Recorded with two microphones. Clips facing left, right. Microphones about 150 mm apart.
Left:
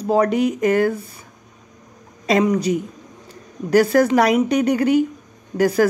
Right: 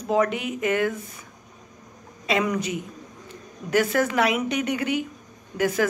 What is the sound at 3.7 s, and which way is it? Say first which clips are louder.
A woman's voice: left 7 dB; 35° left (ahead or behind).